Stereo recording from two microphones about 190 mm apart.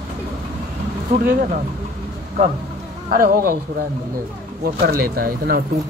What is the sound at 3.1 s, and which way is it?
Speech, 50° right (ahead or behind).